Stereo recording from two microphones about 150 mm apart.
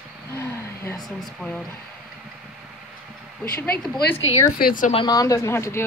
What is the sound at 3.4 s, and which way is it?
Speech, 10° left (ahead or behind).